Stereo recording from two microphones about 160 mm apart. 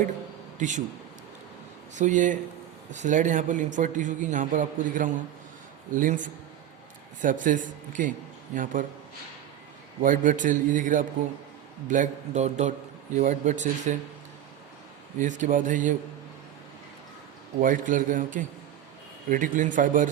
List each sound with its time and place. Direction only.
0.6 s a man's voice: 50° right (ahead or behind)
2.0 s a man's voice: 50° right (ahead or behind)
10.0 s a man's voice: 55° right (ahead or behind)
15.2 s a man's voice: 50° right (ahead or behind)
17.6 s a man's voice: 55° right (ahead or behind)